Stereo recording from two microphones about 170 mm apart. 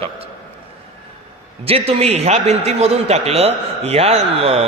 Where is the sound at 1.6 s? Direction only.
35° right (ahead or behind).